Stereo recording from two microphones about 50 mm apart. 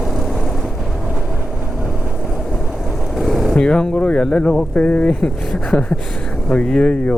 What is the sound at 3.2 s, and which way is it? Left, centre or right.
Vehicle, centre.